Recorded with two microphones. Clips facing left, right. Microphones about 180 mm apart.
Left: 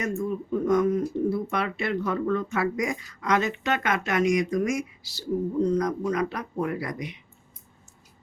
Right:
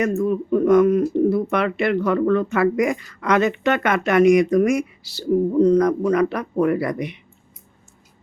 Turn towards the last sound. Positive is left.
turn(degrees=-65)  # may be behind; listen again after turning